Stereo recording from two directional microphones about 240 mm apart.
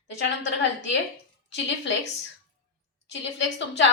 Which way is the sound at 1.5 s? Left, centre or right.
Left.